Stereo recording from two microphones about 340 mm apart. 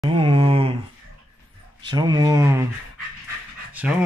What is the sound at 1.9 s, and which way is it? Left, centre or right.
Speech, centre.